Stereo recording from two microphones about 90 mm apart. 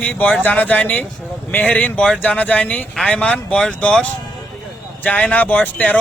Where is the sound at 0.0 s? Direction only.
15° left (ahead or behind).